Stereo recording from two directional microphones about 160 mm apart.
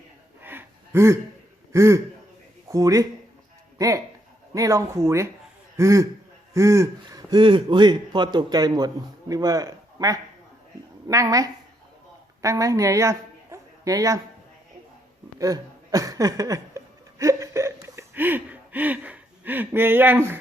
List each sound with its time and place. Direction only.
0.4 s a sound: 15° right (ahead or behind)
1.7 s a man's voice: 15° right (ahead or behind)
15.4 s chuckle: 20° right (ahead or behind)